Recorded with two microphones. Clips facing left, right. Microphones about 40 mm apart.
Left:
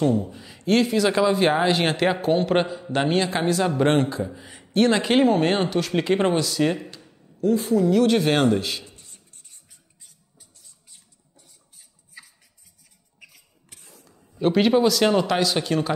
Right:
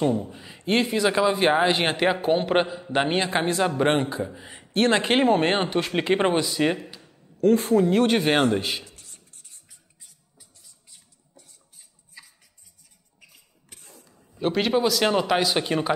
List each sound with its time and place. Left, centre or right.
0.0 s speech: centre
4.7 s speech: right
7.3 s a woman's voice: right
7.8 s speech: right
8.5 s speech: centre
8.8 s writing: left
13.7 s speech: centre